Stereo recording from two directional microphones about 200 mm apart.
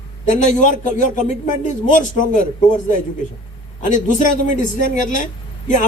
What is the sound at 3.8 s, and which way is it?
Speech, 40° left (ahead or behind).